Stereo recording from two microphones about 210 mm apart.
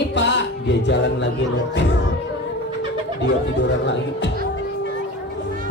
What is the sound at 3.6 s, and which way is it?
Speech, 60° left (ahead or behind).